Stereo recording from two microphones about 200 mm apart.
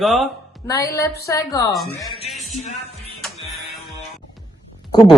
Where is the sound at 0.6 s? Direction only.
10° left (ahead or behind).